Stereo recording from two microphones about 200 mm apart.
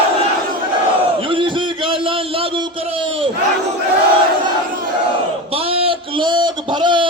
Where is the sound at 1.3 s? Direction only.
25° right (ahead or behind).